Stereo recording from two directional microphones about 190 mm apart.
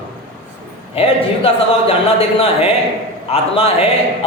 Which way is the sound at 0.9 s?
30° left (ahead or behind).